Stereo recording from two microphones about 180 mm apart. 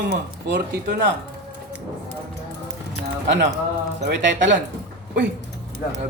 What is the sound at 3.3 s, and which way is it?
Speech, 75° right (ahead or behind).